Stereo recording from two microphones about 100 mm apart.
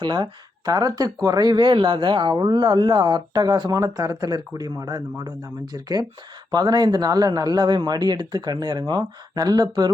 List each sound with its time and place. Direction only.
0.0 s speech: 50° right (ahead or behind)